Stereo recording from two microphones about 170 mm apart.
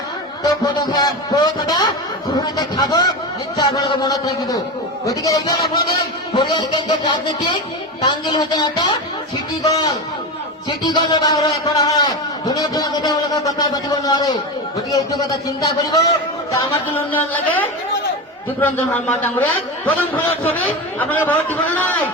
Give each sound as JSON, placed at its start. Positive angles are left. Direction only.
{"t": 0.4, "sound": "a man's voice", "side_deg": 20}
{"t": 16.5, "sound": "a man's voice", "side_deg": 10}